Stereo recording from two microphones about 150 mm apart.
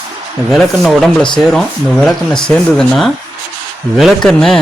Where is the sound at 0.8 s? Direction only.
Centre (ahead or behind).